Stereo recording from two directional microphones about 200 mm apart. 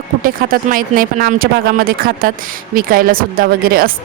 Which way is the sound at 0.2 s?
45° right (ahead or behind).